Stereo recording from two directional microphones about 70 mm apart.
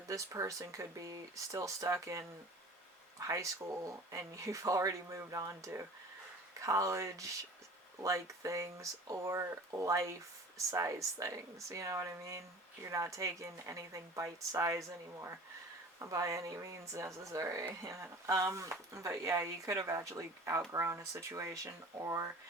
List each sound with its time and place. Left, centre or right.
0.1 s speech: right